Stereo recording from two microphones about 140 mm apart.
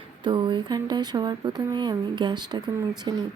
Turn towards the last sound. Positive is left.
turn(degrees=-30)  # may be behind; listen again after turning